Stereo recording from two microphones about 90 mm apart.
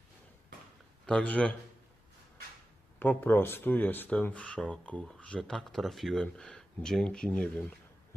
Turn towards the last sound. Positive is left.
turn(degrees=10)  # may be behind; listen again after turning